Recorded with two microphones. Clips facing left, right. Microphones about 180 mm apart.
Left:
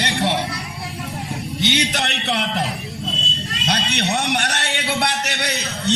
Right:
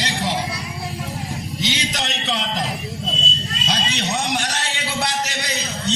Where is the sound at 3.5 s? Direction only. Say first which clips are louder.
Left 3 dB; 65° left (ahead or behind).